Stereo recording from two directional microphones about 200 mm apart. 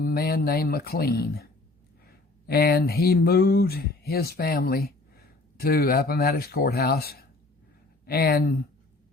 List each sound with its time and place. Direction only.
0.0 s speech: 50° left (ahead or behind)
2.5 s speech: 50° left (ahead or behind)